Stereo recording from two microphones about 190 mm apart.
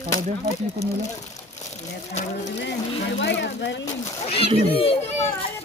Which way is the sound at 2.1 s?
35° left (ahead or behind).